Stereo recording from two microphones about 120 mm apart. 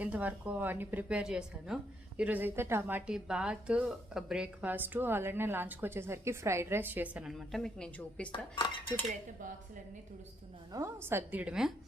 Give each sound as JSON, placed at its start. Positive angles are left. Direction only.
{"t": 0.0, "sound": "a woman's voice", "side_deg": -15}
{"t": 8.3, "sound": "cutlery", "side_deg": 45}
{"t": 10.7, "sound": "a woman's voice", "side_deg": -25}